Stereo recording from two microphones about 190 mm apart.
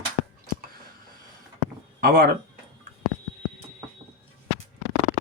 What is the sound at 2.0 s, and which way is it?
Speech, 50° right (ahead or behind).